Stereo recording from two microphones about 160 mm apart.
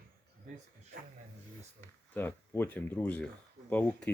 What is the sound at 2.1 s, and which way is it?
Speech, 10° left (ahead or behind).